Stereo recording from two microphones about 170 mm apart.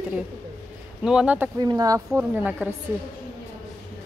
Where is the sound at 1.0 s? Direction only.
5° right (ahead or behind).